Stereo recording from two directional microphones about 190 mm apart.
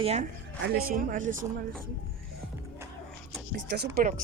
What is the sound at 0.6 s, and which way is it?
Speech, 50° right (ahead or behind).